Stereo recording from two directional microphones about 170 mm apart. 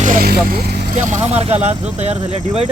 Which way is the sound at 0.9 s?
45° right (ahead or behind).